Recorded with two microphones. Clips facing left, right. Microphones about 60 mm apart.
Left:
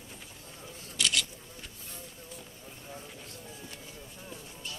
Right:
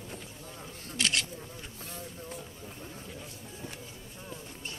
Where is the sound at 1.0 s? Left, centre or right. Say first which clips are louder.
Even; right.